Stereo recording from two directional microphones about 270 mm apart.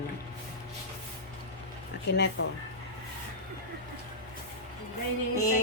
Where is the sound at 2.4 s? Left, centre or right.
Left.